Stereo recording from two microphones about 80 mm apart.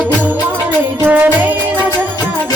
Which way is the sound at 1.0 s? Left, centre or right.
Right.